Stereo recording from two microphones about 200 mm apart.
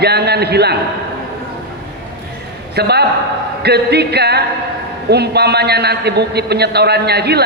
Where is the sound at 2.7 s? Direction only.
55° right (ahead or behind).